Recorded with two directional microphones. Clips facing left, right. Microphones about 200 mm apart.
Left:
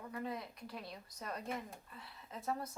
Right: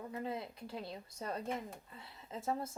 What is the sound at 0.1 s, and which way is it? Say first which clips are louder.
A woman's voice: even; 25° right (ahead or behind).